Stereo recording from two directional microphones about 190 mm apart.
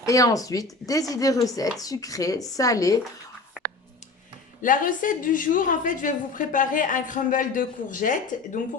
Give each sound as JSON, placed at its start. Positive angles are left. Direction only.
{"t": 0.0, "sound": "a woman's voice", "side_deg": 20}
{"t": 3.6, "sound": "clicking", "side_deg": -5}
{"t": 4.6, "sound": "a woman's voice", "side_deg": 45}